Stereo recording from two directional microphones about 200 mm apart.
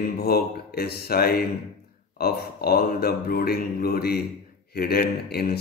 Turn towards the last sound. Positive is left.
turn(degrees=50)  # may be behind; listen again after turning